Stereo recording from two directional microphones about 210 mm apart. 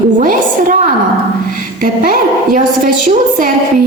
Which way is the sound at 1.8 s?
40° right (ahead or behind).